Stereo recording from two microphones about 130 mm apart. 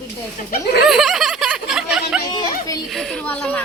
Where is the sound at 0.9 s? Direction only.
Centre (ahead or behind).